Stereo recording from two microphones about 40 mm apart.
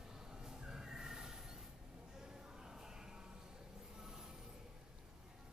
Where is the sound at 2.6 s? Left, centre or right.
Centre.